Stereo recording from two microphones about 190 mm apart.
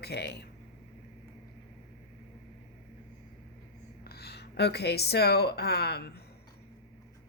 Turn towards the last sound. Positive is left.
turn(degrees=55)  # may be behind; listen again after turning